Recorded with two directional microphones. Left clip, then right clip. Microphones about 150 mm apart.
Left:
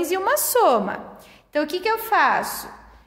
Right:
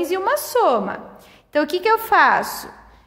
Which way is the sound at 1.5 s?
25° right (ahead or behind).